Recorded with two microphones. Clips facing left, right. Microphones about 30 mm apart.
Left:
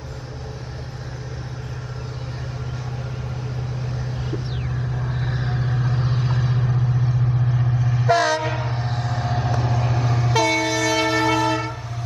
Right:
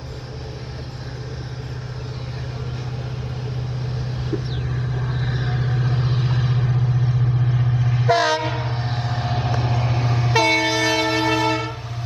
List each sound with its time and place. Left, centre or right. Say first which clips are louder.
4.2 s vehicle: right 2 dB; centre